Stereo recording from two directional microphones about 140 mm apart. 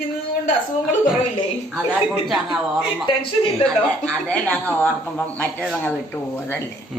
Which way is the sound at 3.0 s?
40° left (ahead or behind).